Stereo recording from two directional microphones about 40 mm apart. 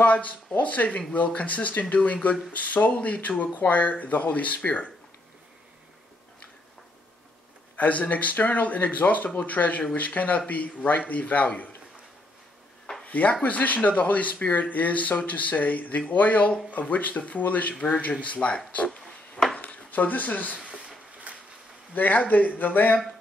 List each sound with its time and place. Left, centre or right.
0.0 s speech: left
7.7 s speech: left
13.0 s speech: left
17.7 s a man's voice: left
18.2 s speech: left
19.6 s a sound: left
21.3 s a sound: right
21.9 s speech: left